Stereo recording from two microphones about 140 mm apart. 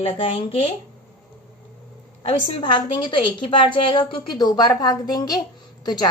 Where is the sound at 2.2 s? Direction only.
40° left (ahead or behind).